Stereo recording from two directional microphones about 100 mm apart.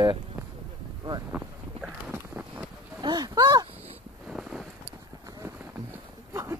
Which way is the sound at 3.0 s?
45° right (ahead or behind).